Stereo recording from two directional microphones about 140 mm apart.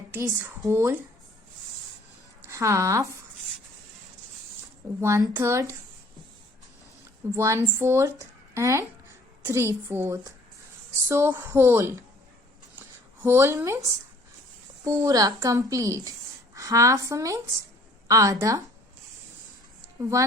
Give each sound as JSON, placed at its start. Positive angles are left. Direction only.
{"t": 0.1, "sound": "a woman's voice", "side_deg": -15}
{"t": 2.5, "sound": "speech", "side_deg": -20}
{"t": 4.9, "sound": "speech", "side_deg": -20}
{"t": 7.3, "sound": "speech", "side_deg": -20}
{"t": 13.2, "sound": "speech", "side_deg": -20}
{"t": 14.8, "sound": "speech", "side_deg": -25}
{"t": 20.0, "sound": "speech", "side_deg": -20}